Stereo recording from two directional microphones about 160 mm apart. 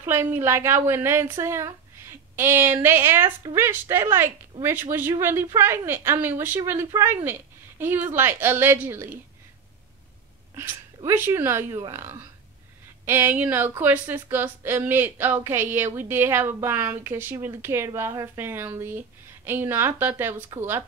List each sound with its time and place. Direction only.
0.0 s a woman's voice: 15° right (ahead or behind)
11.1 s a woman's voice: 15° right (ahead or behind)